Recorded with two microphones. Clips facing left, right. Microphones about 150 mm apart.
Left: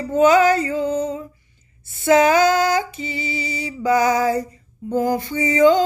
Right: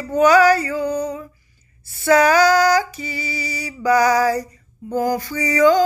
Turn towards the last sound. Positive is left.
turn(degrees=25)  # may be behind; listen again after turning